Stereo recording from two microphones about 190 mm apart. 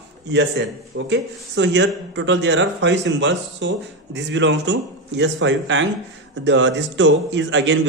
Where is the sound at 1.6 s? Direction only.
65° right (ahead or behind).